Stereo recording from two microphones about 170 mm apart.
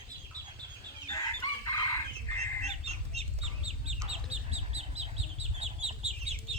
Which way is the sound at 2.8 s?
40° right (ahead or behind).